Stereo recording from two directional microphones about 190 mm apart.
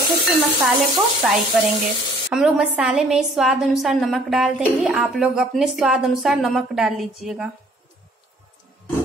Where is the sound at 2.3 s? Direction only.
5° right (ahead or behind).